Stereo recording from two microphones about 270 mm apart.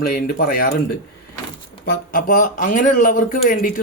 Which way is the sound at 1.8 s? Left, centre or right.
Left.